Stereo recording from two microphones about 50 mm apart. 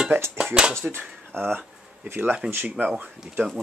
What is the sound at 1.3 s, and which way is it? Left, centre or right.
Speech, right.